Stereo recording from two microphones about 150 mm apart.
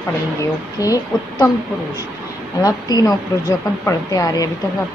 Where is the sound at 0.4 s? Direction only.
20° left (ahead or behind).